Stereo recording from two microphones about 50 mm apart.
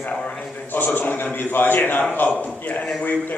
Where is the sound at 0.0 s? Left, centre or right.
Left.